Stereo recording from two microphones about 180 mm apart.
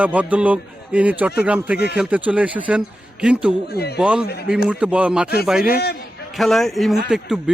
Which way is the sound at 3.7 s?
65° left (ahead or behind).